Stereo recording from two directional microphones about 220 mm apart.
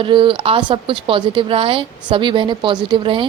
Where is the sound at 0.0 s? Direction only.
20° right (ahead or behind).